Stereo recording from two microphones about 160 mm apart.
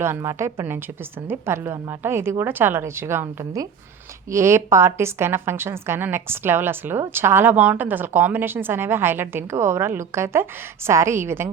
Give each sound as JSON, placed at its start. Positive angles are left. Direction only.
{"t": 0.0, "sound": "a woman's voice", "side_deg": -15}